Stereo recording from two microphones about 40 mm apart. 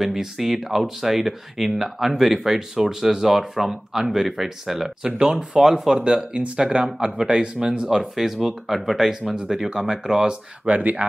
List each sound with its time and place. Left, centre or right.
0.0 s speech: centre
5.0 s speech: centre
6.3 s speech: right
10.7 s speech: right